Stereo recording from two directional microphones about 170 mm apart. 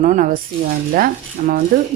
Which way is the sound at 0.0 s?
50° right (ahead or behind).